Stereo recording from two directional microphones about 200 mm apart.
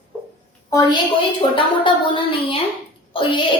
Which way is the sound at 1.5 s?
25° left (ahead or behind).